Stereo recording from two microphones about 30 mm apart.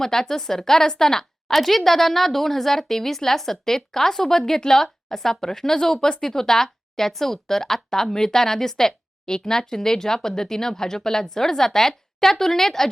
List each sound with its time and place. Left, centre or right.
0.0 s a woman's voice: centre